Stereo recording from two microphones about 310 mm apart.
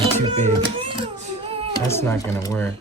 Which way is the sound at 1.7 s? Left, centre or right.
Centre.